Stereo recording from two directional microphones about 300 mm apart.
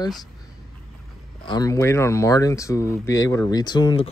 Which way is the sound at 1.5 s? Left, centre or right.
Centre.